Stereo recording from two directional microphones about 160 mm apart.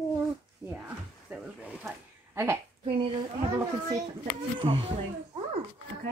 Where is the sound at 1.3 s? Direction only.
5° right (ahead or behind).